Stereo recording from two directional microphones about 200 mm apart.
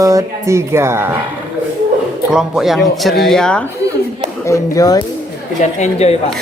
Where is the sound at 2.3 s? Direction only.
Centre (ahead or behind).